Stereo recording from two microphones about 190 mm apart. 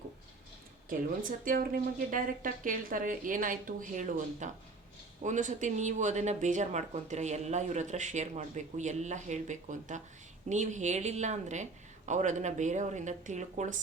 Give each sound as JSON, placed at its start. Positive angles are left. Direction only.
{"t": 0.9, "sound": "speech", "side_deg": -45}